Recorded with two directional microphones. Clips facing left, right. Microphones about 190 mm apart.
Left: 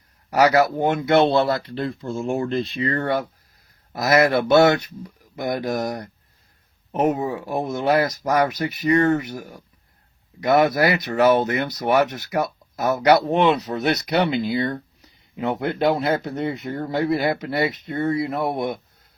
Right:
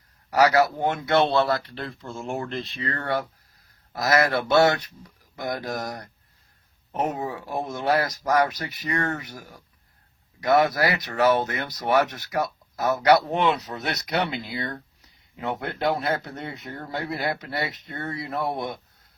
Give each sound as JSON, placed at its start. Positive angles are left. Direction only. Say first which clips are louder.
{"t": 0.3, "sound": "speech", "louder": "left 2 dB", "side_deg": 20}
{"t": 2.7, "sound": "speech", "louder": "left 2 dB", "side_deg": 25}
{"t": 10.4, "sound": "speech", "louder": "left 3 dB", "side_deg": 20}